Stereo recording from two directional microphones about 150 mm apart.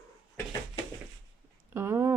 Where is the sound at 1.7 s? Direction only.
15° right (ahead or behind).